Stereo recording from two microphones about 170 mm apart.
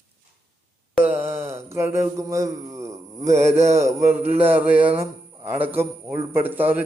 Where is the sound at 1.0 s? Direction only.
10° right (ahead or behind).